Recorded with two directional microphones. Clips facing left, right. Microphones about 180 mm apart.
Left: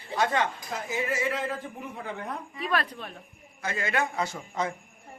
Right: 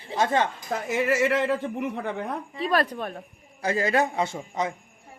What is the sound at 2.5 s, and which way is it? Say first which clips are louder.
Speech: right 4 dB; 30° right (ahead or behind).